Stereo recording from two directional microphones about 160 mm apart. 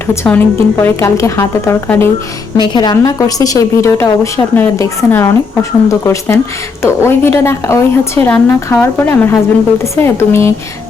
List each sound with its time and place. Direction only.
0.1 s a woman's voice: 10° left (ahead or behind)
2.6 s a woman's voice: 30° left (ahead or behind)